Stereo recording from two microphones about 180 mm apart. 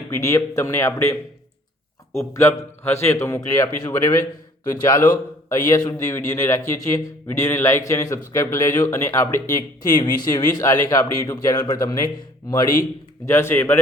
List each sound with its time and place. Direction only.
0.1 s a man's voice: 15° left (ahead or behind)
2.3 s a man's voice: 15° left (ahead or behind)